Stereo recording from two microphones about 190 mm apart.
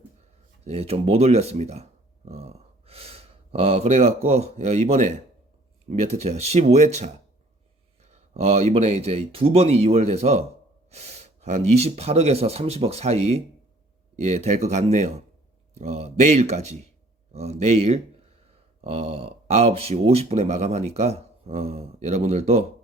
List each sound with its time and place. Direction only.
0.6 s speech: 30° right (ahead or behind)
8.1 s a man's voice: 35° right (ahead or behind)